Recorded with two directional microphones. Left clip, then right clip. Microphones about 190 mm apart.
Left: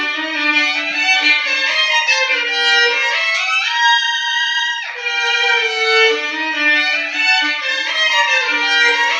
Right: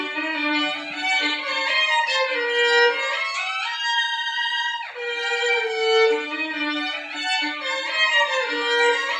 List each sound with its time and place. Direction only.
5.8 s violin: 30° right (ahead or behind)